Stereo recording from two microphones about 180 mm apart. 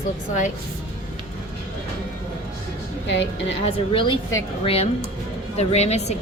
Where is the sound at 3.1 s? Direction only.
75° left (ahead or behind).